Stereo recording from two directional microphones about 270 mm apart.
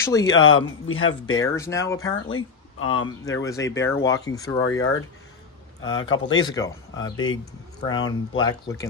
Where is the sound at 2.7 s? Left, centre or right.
Left.